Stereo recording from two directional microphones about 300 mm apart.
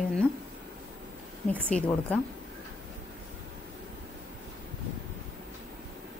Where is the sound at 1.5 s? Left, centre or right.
Centre.